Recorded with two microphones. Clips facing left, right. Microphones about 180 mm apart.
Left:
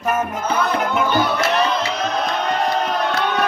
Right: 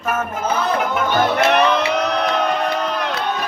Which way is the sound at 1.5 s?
65° right (ahead or behind).